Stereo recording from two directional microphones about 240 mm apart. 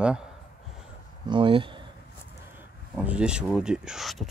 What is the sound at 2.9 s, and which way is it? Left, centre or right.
Speech, centre.